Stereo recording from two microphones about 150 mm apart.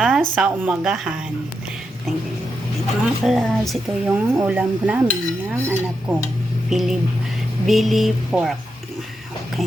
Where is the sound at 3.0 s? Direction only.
Centre (ahead or behind).